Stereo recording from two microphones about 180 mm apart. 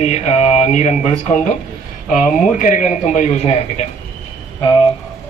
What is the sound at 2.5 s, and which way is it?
A man's voice, 45° left (ahead or behind).